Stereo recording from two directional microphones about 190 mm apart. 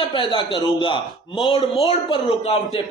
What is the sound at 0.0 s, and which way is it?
A man's voice, 25° left (ahead or behind).